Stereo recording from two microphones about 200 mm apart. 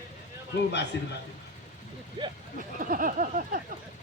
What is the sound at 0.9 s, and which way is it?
Speech, 60° left (ahead or behind).